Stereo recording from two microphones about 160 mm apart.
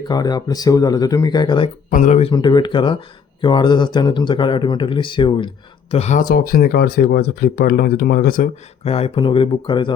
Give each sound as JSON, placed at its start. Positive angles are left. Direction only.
{"t": 0.1, "sound": "speech", "side_deg": 25}
{"t": 1.9, "sound": "speech", "side_deg": 50}
{"t": 2.3, "sound": "speech", "side_deg": 25}
{"t": 5.9, "sound": "speech", "side_deg": 45}
{"t": 8.8, "sound": "speech", "side_deg": 40}